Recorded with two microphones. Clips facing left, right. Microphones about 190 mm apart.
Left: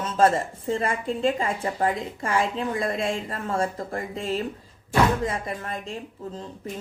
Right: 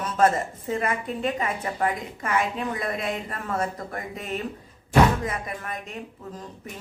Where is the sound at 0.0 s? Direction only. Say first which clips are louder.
Left 1 dB; 25° left (ahead or behind).